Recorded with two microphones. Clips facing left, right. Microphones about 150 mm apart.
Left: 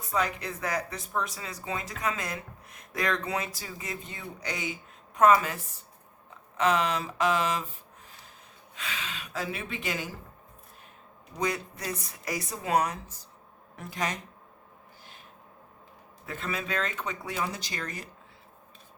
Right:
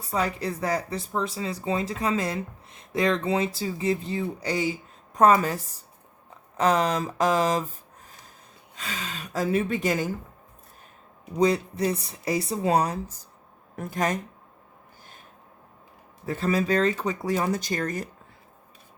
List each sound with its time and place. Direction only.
0.1 s speech: 35° right (ahead or behind)
8.7 s speech: 40° right (ahead or behind)
11.3 s speech: 30° right (ahead or behind); by 14.2 s 45° right (ahead or behind)
16.2 s speech: 35° right (ahead or behind)